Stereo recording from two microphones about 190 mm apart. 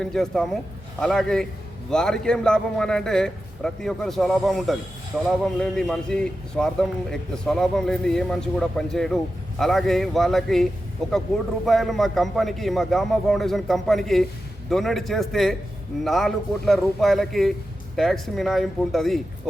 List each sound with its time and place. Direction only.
0.0 s a man's voice: centre (ahead or behind)